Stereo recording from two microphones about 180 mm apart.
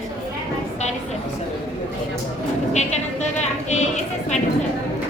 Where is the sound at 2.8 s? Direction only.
40° left (ahead or behind).